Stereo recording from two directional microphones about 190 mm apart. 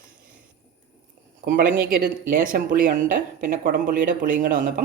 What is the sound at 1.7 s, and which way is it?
Speech, 50° right (ahead or behind).